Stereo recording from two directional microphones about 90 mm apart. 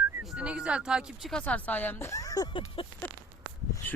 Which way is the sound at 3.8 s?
20° left (ahead or behind).